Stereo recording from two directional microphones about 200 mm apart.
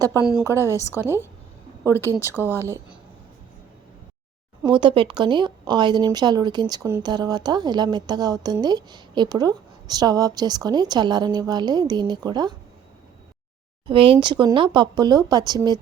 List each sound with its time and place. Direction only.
0.3 s a woman's voice: 10° right (ahead or behind)
2.1 s a woman's voice: 10° right (ahead or behind)
4.6 s a woman's voice: 25° right (ahead or behind)
13.8 s a woman's voice: 25° right (ahead or behind)